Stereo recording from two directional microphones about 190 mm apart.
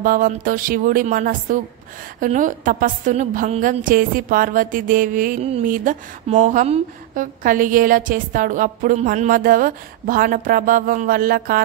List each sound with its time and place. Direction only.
0.0 s a woman's voice: 45° right (ahead or behind)